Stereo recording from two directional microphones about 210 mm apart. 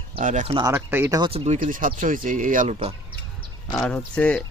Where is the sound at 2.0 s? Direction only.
40° right (ahead or behind).